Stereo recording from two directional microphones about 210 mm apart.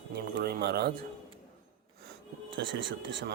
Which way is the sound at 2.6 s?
60° right (ahead or behind).